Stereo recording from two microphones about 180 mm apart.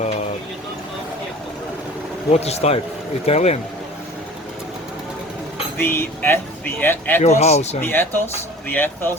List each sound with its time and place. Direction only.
2.3 s speech: 35° left (ahead or behind)
5.7 s speech: 15° left (ahead or behind)
7.2 s speech: 35° left (ahead or behind)
7.8 s speech: 10° left (ahead or behind)